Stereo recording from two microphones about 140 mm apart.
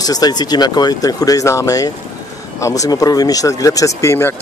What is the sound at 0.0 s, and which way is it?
A man's voice, 25° left (ahead or behind).